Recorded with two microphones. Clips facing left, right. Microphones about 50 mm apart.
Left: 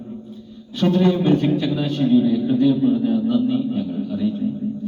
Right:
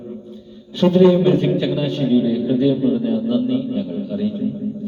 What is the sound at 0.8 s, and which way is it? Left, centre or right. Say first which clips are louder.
Speech: right 5 dB; right.